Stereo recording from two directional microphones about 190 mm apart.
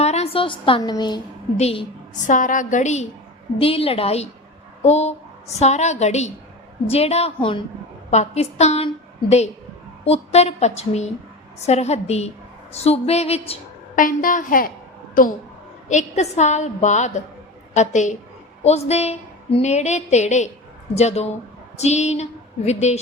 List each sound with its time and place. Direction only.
0.0 s a woman's voice: 35° left (ahead or behind)
1.5 s a woman's voice: 35° left (ahead or behind)
10.0 s a woman's voice: 35° left (ahead or behind)
14.0 s a woman's voice: 45° left (ahead or behind)
21.8 s a sound: 35° left (ahead or behind)